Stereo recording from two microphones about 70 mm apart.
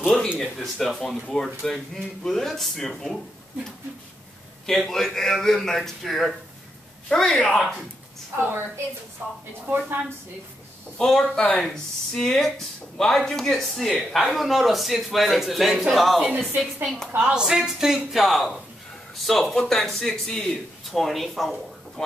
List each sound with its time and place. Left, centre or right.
0.0 s speech: centre
4.6 s speech: centre
9.2 s a woman's voice: right
11.0 s speech: centre